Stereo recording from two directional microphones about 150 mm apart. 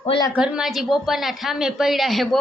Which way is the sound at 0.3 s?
5° right (ahead or behind).